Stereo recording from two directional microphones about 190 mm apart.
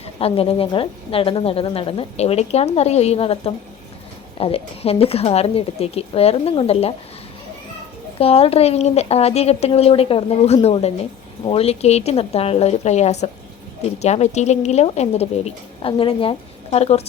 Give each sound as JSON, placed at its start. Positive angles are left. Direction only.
{"t": 0.0, "sound": "a woman's voice", "side_deg": 30}
{"t": 8.2, "sound": "a woman's voice", "side_deg": 30}